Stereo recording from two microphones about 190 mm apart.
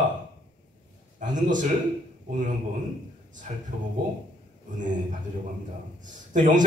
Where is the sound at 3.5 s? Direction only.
40° right (ahead or behind).